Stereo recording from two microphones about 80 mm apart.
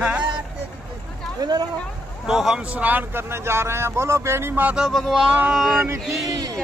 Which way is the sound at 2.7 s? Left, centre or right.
Right.